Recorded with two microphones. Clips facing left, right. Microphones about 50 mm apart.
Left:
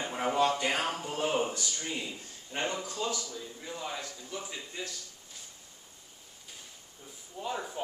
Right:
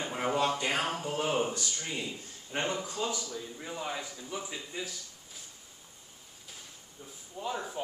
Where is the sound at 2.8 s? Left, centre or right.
Centre.